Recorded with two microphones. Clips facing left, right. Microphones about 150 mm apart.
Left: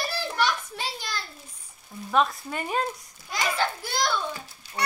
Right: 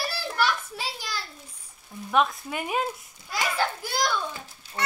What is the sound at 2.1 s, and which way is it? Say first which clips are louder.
Speech: even; centre (ahead or behind).